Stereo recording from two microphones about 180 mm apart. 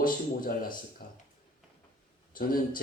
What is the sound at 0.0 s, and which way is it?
A man's voice, 50° left (ahead or behind).